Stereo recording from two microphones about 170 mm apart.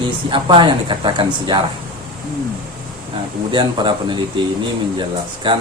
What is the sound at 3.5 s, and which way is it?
Speech, 30° right (ahead or behind).